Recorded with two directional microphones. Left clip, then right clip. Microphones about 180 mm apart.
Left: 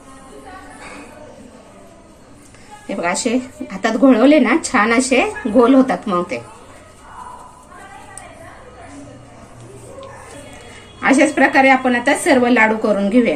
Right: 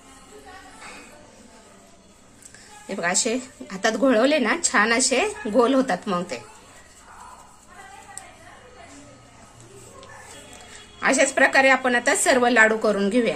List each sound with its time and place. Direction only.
3.0 s a woman's voice: 50° right (ahead or behind)
11.0 s a woman's voice: 45° right (ahead or behind)